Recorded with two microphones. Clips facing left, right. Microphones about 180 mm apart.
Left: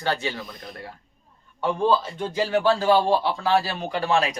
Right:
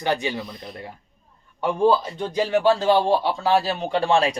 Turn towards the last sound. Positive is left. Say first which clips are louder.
# right 3 dB
turn(degrees=-30)  # may be behind; listen again after turning